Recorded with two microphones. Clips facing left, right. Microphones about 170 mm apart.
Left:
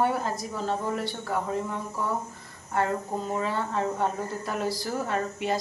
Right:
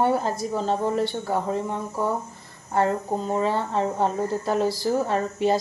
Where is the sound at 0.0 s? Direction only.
30° right (ahead or behind).